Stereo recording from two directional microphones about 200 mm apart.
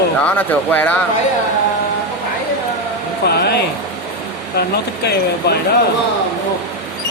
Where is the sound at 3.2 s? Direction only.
55° left (ahead or behind).